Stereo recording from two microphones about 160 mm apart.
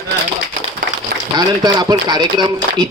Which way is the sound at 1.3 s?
25° right (ahead or behind).